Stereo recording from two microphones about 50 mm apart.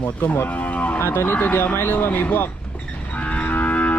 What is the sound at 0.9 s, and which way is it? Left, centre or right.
Speech, left.